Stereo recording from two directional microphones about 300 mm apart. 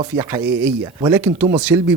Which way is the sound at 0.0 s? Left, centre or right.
Centre.